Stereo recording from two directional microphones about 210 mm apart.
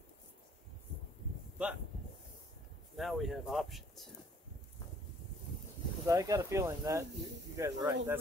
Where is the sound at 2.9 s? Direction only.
Centre (ahead or behind).